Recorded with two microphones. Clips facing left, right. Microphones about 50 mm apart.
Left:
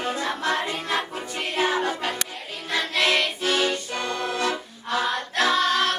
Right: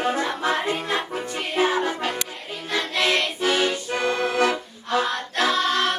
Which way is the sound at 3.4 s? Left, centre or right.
Centre.